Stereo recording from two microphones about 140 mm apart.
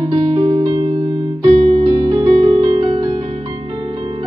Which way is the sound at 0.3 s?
45° right (ahead or behind).